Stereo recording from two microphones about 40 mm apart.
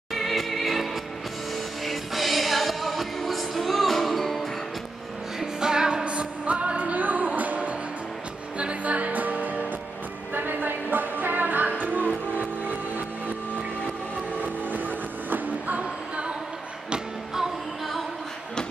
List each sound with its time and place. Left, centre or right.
0.1 s music: centre
1.9 s music: centre
5.4 s music: centre
6.0 s music: right
10.3 s music: right
14.4 s music: right
15.8 s a sound: right